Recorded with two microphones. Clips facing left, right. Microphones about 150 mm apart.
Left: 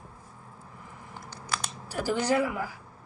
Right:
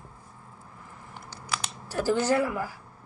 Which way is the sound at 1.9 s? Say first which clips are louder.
Right 2 dB; 15° left (ahead or behind).